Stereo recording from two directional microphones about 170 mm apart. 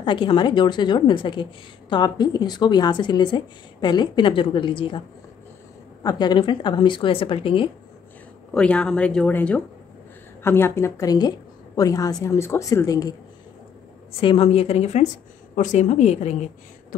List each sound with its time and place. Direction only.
0.0 s a woman's voice: 30° left (ahead or behind)
6.0 s a woman's voice: 25° left (ahead or behind)
8.5 s a woman's voice: 5° left (ahead or behind); by 13.1 s 20° left (ahead or behind)
14.2 s a woman's voice: 35° left (ahead or behind)